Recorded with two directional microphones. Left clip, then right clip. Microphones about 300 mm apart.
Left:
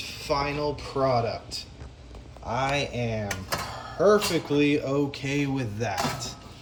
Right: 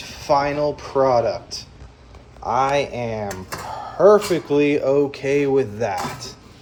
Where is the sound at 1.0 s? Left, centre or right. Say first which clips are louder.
Right 6 dB; centre.